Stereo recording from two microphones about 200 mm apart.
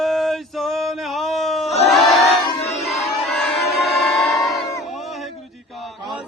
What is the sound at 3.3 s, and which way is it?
Crowd, centre (ahead or behind).